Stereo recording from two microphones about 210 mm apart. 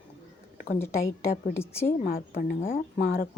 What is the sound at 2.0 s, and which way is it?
Speech, 45° left (ahead or behind).